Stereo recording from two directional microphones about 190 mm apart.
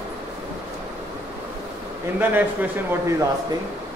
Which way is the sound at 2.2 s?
10° right (ahead or behind).